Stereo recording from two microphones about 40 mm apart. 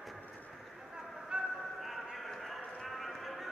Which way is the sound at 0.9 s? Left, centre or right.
Centre.